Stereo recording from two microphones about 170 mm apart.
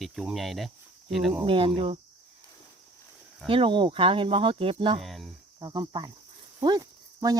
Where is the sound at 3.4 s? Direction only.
30° right (ahead or behind).